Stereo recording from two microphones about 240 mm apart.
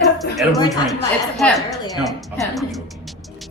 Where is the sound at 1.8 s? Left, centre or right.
Centre.